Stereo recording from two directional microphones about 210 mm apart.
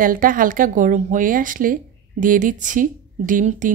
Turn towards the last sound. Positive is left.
turn(degrees=-40)  # may be behind; listen again after turning